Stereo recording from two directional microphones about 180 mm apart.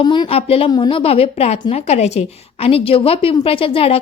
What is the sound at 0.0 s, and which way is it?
A woman's voice, 25° left (ahead or behind).